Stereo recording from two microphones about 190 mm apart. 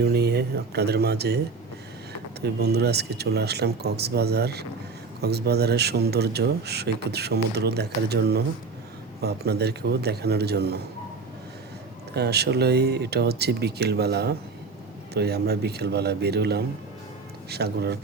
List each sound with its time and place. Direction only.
0.0 s speech: 60° right (ahead or behind)
2.4 s speech: 60° right (ahead or behind)
12.1 s speech: 60° right (ahead or behind)